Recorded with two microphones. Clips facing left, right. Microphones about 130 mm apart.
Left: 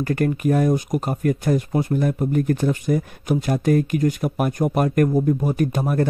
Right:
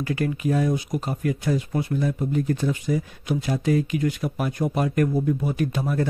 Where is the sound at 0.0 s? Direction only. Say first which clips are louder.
Left 4 dB; 50° left (ahead or behind).